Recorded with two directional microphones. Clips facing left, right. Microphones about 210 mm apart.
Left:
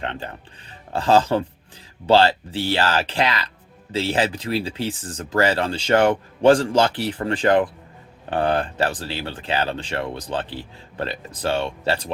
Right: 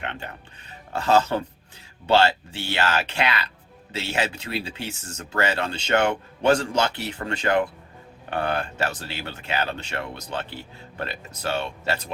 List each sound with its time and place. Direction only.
0.0 s speech: 30° left (ahead or behind)